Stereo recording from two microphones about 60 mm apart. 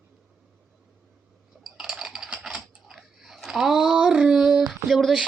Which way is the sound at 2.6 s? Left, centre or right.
Centre.